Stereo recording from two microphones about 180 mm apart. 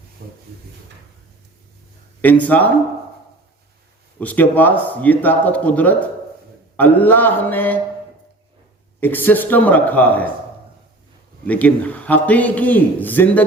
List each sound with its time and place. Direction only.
0.2 s speech: 60° right (ahead or behind)
2.2 s a man's voice: 10° left (ahead or behind)
4.2 s a man's voice: 10° left (ahead or behind)
9.0 s a man's voice: 10° left (ahead or behind)
11.4 s a man's voice: 10° left (ahead or behind)